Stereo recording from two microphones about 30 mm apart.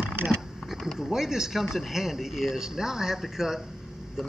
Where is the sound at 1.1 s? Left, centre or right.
Centre.